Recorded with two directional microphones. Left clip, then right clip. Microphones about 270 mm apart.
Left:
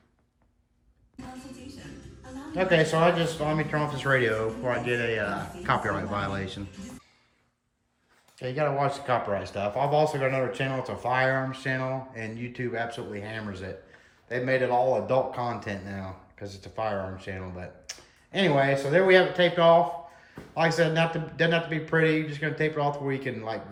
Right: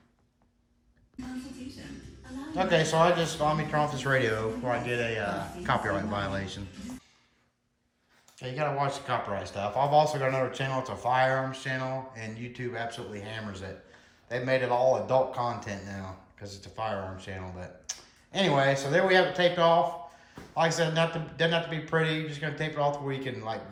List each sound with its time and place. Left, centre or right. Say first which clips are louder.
2.6 s speech: left 2 dB; centre
8.4 s speech: left 3 dB; centre